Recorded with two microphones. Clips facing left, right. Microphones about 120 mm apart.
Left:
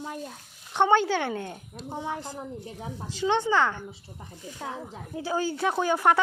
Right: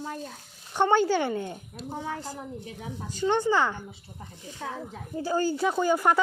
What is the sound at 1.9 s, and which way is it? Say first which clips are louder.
Speech: left 1 dB; 20° left (ahead or behind).